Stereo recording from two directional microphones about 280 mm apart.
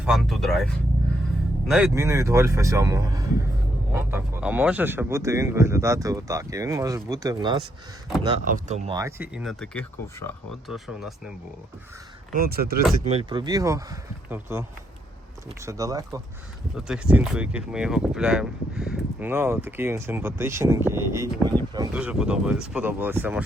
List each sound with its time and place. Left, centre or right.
0.0 s speech: centre
8.4 s speech: right
9.0 s speech: centre
12.3 s speech: right
13.1 s speech: centre
15.6 s speech: centre